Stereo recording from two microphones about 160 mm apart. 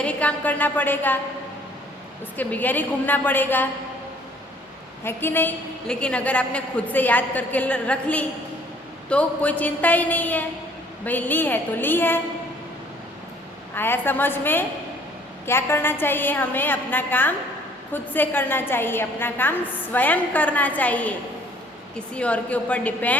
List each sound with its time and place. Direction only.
0.0 s a woman's voice: 10° left (ahead or behind)
2.3 s a woman's voice: 10° left (ahead or behind)
5.0 s a woman's voice: 15° left (ahead or behind)
13.7 s a woman's voice: 15° left (ahead or behind)